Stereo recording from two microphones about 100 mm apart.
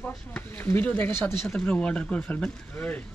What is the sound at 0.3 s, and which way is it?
Speech, 20° left (ahead or behind).